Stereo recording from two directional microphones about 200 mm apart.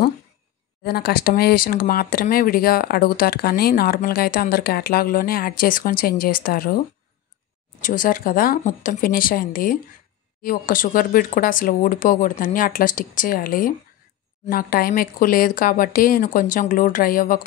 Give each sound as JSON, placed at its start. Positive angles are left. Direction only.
{"t": 0.8, "sound": "speech", "side_deg": 50}
{"t": 7.8, "sound": "speech", "side_deg": 40}